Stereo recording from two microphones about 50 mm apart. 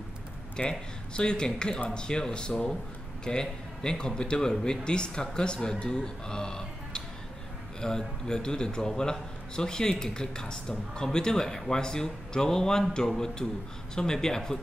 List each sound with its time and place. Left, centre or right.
0.6 s a man's voice: centre